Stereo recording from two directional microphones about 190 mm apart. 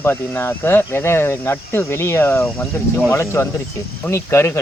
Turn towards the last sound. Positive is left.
turn(degrees=15)  # may be behind; listen again after turning